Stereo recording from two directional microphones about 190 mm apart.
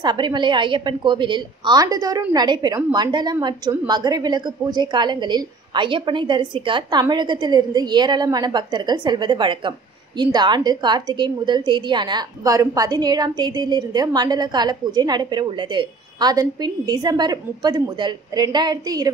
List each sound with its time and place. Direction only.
0.0 s a woman's voice: 25° right (ahead or behind)